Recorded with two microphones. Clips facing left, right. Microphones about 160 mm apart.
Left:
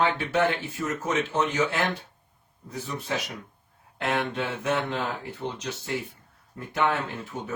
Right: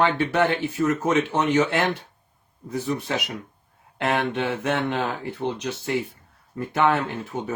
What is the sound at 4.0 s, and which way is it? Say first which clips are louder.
Speech: right 4 dB; 60° right (ahead or behind).